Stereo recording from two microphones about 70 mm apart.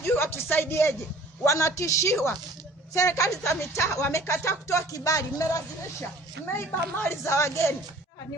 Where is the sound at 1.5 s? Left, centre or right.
Left.